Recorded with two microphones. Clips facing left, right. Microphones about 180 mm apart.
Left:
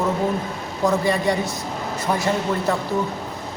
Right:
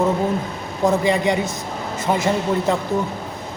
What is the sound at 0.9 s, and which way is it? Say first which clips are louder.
A man's voice: right 2 dB; 20° right (ahead or behind).